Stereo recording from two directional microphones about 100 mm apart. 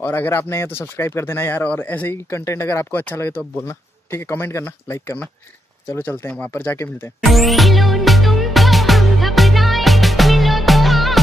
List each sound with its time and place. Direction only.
0.0 s speech: 20° left (ahead or behind)
7.2 s music: centre (ahead or behind)